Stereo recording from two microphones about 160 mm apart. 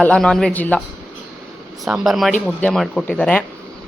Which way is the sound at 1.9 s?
Centre (ahead or behind).